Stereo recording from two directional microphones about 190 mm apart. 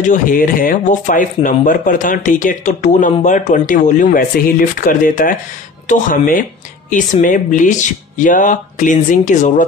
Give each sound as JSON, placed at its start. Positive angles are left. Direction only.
{"t": 0.1, "sound": "speech", "side_deg": 45}